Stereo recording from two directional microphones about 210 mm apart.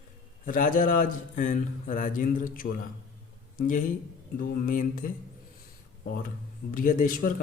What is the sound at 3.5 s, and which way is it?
A man's voice, 40° left (ahead or behind).